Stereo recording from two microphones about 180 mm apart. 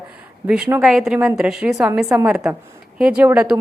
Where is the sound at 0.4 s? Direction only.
5° right (ahead or behind).